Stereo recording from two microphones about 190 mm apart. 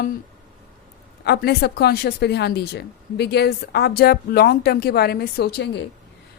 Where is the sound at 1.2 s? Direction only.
60° left (ahead or behind).